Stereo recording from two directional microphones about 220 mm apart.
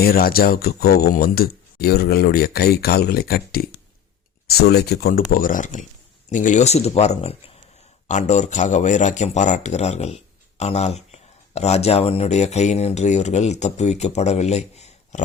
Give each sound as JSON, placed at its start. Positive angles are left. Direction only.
{"t": 0.0, "sound": "speech", "side_deg": 45}